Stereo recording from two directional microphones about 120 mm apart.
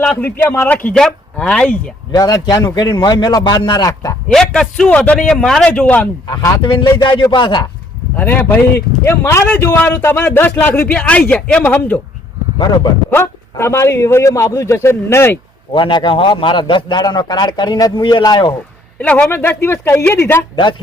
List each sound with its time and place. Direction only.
0.0 s speech: 15° left (ahead or behind)
2.1 s a man's voice: 30° left (ahead or behind)
4.3 s speech: 5° left (ahead or behind)
6.2 s a man's voice: 35° left (ahead or behind)
8.1 s a man's voice: 15° left (ahead or behind)
12.5 s a man's voice: 35° left (ahead or behind)
13.1 s a man's voice: 20° left (ahead or behind)
15.7 s a man's voice: 40° left (ahead or behind)
18.9 s speech: 10° left (ahead or behind)